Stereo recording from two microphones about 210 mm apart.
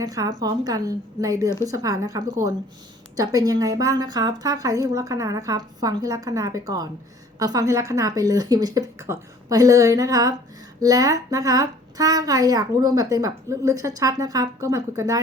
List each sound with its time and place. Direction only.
0.0 s a woman's voice: 15° right (ahead or behind)